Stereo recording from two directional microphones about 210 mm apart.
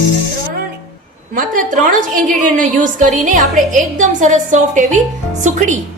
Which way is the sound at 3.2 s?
40° right (ahead or behind).